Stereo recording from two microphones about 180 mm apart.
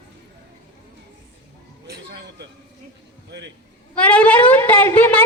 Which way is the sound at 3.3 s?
75° right (ahead or behind).